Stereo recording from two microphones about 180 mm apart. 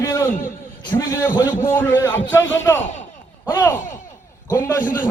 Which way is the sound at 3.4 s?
10° left (ahead or behind).